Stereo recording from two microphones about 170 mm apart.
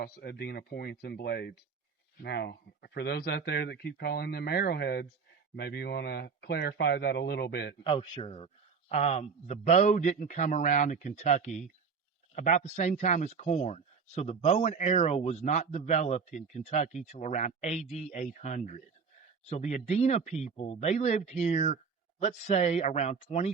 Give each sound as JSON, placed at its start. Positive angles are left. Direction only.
{"t": 0.0, "sound": "speech", "side_deg": 65}
{"t": 7.9, "sound": "a man's voice", "side_deg": 30}